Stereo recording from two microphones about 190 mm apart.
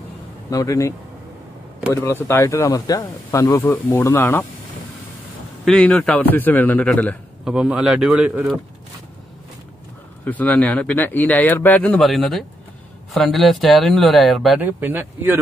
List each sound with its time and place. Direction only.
0.5 s speech: 15° left (ahead or behind)
2.0 s speech: 15° left (ahead or behind)
5.7 s speech: 5° left (ahead or behind)
10.2 s speech: 10° left (ahead or behind); by 15.4 s 10° right (ahead or behind)